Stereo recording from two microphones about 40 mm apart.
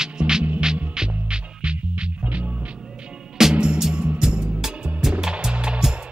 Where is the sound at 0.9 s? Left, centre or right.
Centre.